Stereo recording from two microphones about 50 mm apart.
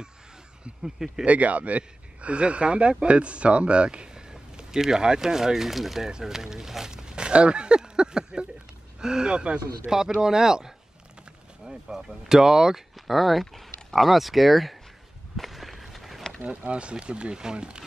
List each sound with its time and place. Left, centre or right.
0.8 s speech: centre
1.2 s speech: right; by 12.8 s centre
13.0 s speech: centre
15.3 s walk: centre
16.4 s speech: right